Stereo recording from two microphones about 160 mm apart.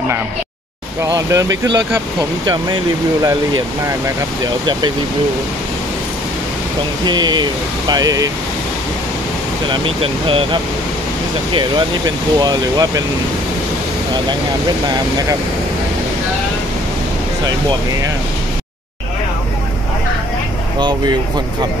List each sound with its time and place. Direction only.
1.1 s speech: 20° right (ahead or behind)
7.1 s speech: 25° right (ahead or behind)
9.7 s speech: 35° right (ahead or behind)